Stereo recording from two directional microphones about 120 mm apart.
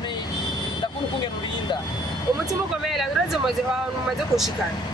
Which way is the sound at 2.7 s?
Centre (ahead or behind).